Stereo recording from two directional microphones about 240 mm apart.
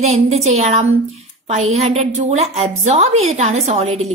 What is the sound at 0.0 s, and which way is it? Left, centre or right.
A woman's voice, right.